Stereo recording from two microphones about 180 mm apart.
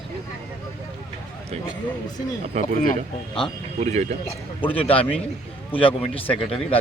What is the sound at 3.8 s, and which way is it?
Speech, 35° right (ahead or behind).